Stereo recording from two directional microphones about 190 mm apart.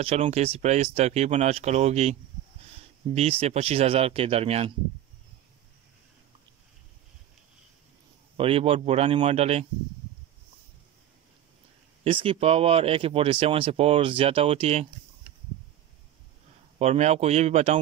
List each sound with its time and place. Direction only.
0.0 s speech: 35° right (ahead or behind)
3.2 s speech: 30° right (ahead or behind)
8.4 s speech: 30° right (ahead or behind)
12.0 s speech: 30° right (ahead or behind)
16.7 s speech: 35° right (ahead or behind)